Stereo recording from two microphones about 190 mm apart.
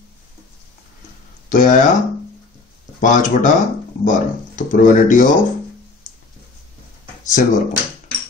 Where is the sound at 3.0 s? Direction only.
45° left (ahead or behind).